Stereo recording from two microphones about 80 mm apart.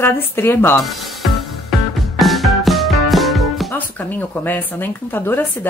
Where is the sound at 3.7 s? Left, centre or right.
Left.